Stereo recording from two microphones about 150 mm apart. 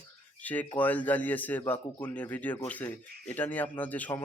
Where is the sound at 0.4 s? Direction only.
10° left (ahead or behind).